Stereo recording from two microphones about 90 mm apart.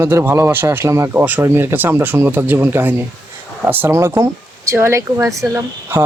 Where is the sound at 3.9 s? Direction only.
30° right (ahead or behind).